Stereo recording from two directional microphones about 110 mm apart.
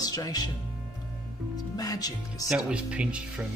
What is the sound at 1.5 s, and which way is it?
Speech, 35° left (ahead or behind).